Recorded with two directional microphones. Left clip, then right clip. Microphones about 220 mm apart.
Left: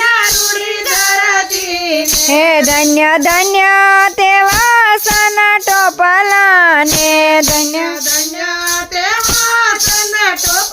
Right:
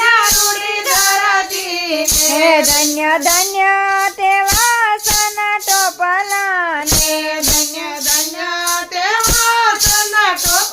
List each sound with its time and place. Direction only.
2.4 s child singing: 45° left (ahead or behind)